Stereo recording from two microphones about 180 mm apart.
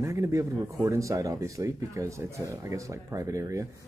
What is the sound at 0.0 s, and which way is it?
Speech, 15° right (ahead or behind).